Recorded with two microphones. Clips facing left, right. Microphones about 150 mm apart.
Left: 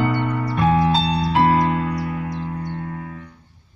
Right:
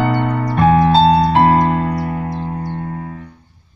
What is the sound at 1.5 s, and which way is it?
Music, 35° right (ahead or behind).